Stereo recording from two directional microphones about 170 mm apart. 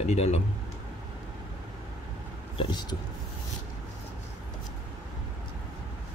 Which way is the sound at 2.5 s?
30° left (ahead or behind).